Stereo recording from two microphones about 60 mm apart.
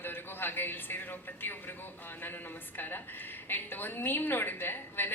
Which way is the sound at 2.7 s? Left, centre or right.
Left.